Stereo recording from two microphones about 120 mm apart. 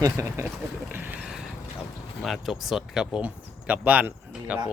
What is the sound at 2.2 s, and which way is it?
Speech, centre (ahead or behind).